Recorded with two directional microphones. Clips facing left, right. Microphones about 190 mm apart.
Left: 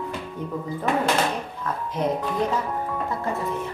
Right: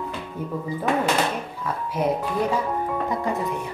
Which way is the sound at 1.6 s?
10° right (ahead or behind).